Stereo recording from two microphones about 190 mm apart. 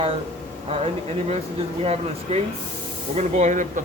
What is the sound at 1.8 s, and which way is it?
Speech, 35° right (ahead or behind).